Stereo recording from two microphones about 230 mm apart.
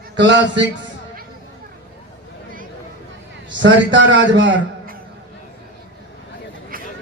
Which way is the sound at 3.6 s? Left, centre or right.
Right.